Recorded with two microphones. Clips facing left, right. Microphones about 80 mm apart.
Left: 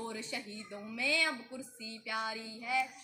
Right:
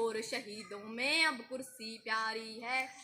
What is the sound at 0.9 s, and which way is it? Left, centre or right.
Speech, right.